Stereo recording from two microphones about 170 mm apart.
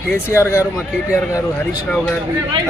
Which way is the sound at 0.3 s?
15° left (ahead or behind).